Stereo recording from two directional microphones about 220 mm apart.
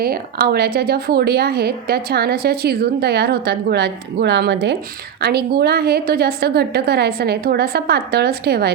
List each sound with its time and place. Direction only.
0.0 s a woman's voice: 45° right (ahead or behind)